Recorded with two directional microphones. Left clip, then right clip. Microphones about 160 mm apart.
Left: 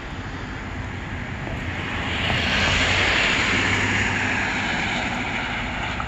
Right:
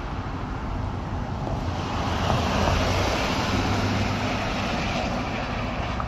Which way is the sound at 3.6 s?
55° right (ahead or behind).